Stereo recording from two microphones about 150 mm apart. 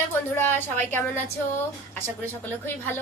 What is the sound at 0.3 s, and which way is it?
Speech, 15° left (ahead or behind).